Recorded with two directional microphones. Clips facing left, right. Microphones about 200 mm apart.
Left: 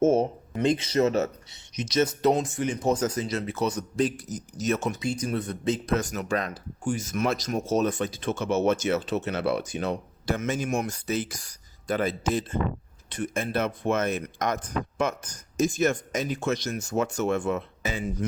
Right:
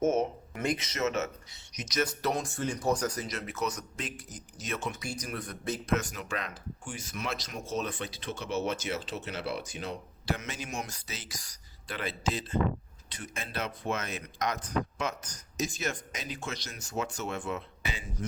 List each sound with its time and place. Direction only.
0.0 s speech: 30° left (ahead or behind)
4.9 s speech: 25° left (ahead or behind)
5.8 s speech: 40° left (ahead or behind)